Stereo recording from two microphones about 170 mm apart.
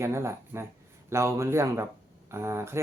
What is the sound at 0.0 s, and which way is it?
Speech, 15° right (ahead or behind).